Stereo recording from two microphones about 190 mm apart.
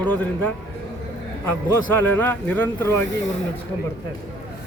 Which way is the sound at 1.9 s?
10° left (ahead or behind).